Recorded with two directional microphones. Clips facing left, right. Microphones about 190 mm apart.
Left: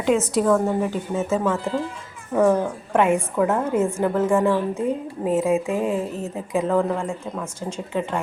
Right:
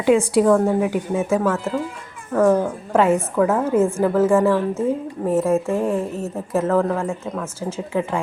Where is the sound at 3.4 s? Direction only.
5° right (ahead or behind).